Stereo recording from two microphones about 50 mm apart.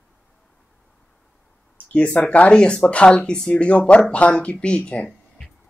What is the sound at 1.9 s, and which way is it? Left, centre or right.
Speech, left.